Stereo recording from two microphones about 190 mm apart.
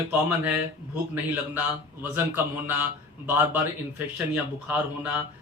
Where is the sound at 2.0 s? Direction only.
10° right (ahead or behind).